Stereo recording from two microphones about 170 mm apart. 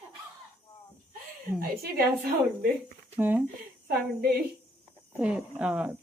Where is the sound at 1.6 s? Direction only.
65° right (ahead or behind).